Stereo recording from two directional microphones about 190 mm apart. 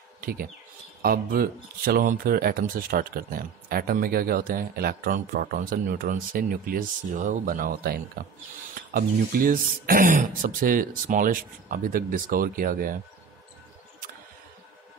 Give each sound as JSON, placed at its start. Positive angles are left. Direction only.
{"t": 0.2, "sound": "speech", "side_deg": -50}